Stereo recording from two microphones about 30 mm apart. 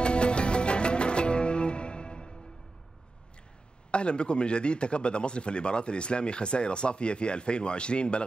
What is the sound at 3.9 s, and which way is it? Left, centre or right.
Speech, left.